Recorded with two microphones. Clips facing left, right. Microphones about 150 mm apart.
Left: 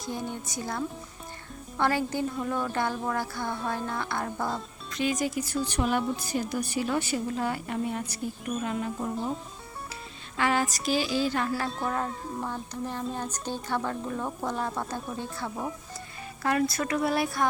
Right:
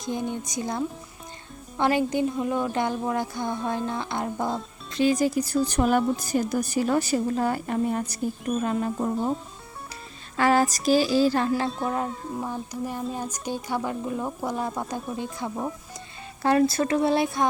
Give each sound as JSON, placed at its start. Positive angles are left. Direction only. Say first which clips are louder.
{"t": 0.0, "sound": "speech", "louder": "right 5 dB", "side_deg": -20}
{"t": 4.9, "sound": "a woman's voice", "louder": "right 6 dB", "side_deg": -30}
{"t": 10.3, "sound": "a woman's voice", "louder": "right 6 dB", "side_deg": -40}
{"t": 11.9, "sound": "speech", "louder": "right 3 dB", "side_deg": -15}
{"t": 16.4, "sound": "speech", "louder": "right 6 dB", "side_deg": -30}